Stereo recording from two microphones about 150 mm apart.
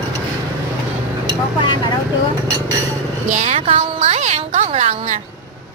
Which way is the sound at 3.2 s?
50° right (ahead or behind).